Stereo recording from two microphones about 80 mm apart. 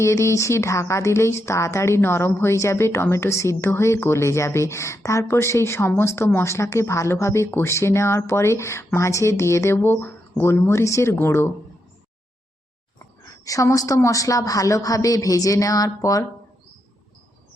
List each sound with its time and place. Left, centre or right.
0.0 s speech: left
13.2 s a woman's voice: left